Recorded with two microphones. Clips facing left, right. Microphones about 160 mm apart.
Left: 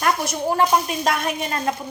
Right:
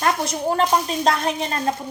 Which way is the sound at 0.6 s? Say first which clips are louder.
Left 1 dB; 30° right (ahead or behind).